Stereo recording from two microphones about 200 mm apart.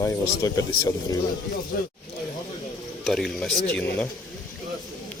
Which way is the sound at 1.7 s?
50° left (ahead or behind).